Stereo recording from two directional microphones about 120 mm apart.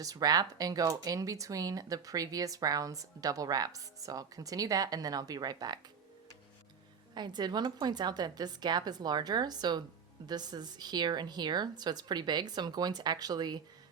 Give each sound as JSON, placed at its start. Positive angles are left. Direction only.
{"t": 0.0, "sound": "speech", "side_deg": -30}
{"t": 7.1, "sound": "speech", "side_deg": -40}